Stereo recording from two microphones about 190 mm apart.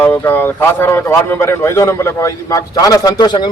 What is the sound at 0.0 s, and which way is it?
Speech, 10° left (ahead or behind).